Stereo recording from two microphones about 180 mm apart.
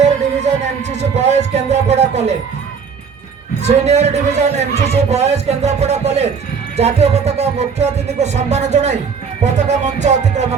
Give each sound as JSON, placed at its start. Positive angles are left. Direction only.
{"t": 0.3, "sound": "music", "side_deg": -40}
{"t": 3.6, "sound": "a man's voice", "side_deg": -35}